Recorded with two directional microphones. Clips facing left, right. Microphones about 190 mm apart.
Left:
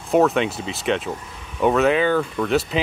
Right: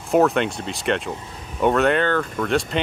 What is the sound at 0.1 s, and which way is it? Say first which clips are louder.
Speech: even; centre (ahead or behind).